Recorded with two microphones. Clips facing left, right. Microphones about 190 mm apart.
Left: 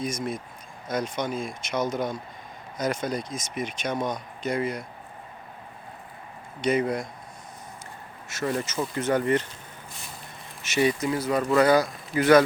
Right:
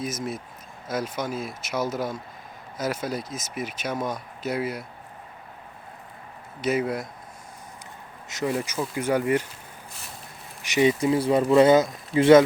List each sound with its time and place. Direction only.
0.0 s speech: 5° right (ahead or behind)
6.6 s speech: 5° right (ahead or behind)
8.3 s speech: 20° right (ahead or behind)
10.6 s speech: 15° right (ahead or behind)
11.0 s speech: 30° right (ahead or behind)